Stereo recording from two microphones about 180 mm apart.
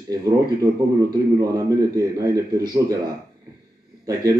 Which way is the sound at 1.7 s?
20° right (ahead or behind).